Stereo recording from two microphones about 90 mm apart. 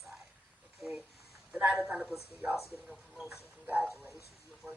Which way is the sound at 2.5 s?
30° left (ahead or behind).